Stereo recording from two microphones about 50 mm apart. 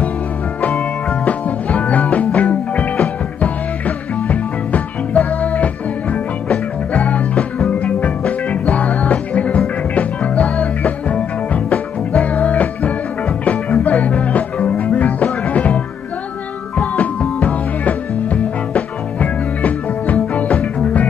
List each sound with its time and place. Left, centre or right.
0.6 s music: left